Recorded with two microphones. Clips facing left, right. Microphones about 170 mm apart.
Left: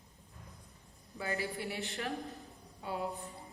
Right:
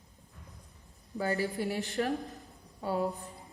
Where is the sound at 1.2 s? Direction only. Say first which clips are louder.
Right 6 dB; 40° right (ahead or behind).